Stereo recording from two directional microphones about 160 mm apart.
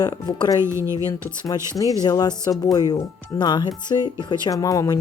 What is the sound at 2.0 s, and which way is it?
Speech, 25° left (ahead or behind).